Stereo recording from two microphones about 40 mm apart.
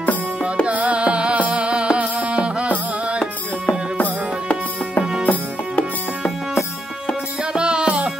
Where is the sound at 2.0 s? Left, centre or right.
Right.